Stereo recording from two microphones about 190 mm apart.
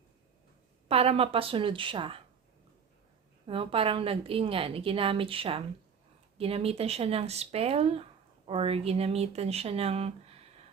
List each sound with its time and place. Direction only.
0.9 s a woman's voice: 30° right (ahead or behind)
3.4 s a woman's voice: 30° right (ahead or behind)